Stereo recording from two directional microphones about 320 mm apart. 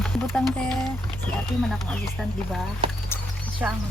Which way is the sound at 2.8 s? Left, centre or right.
Centre.